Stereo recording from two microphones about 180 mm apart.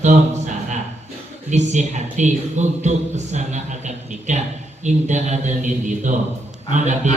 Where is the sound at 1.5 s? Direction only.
40° right (ahead or behind).